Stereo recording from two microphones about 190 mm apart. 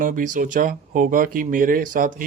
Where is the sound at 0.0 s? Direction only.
45° right (ahead or behind).